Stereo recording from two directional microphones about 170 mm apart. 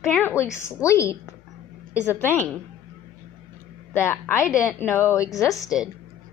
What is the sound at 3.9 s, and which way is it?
A woman's voice, 15° left (ahead or behind).